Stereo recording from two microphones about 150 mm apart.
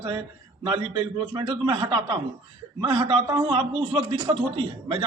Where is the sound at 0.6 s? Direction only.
35° right (ahead or behind).